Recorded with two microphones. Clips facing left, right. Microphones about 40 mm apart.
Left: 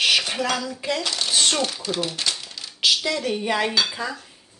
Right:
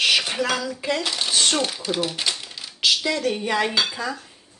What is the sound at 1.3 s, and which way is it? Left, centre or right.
A child's voice, centre.